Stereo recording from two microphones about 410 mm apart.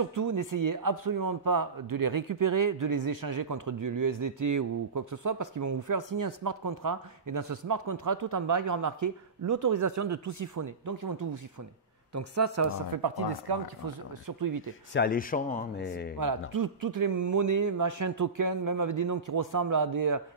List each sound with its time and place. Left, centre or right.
0.0 s speech: right
12.9 s speech: right
15.0 s speech: left
16.2 s speech: right